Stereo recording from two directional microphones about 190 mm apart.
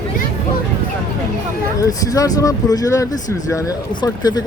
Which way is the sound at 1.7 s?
20° left (ahead or behind).